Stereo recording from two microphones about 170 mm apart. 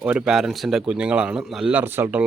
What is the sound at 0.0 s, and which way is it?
A man's voice, 5° right (ahead or behind).